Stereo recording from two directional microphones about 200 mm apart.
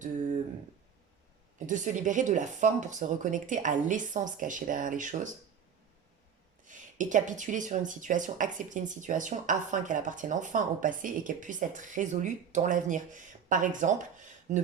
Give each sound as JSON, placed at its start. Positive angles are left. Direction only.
{"t": 1.5, "sound": "speech", "side_deg": -40}
{"t": 6.7, "sound": "speech", "side_deg": -40}